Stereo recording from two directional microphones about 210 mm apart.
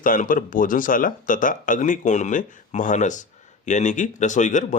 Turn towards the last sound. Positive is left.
turn(degrees=35)  # may be behind; listen again after turning